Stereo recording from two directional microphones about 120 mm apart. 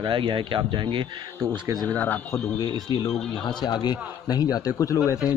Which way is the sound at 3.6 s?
35° left (ahead or behind).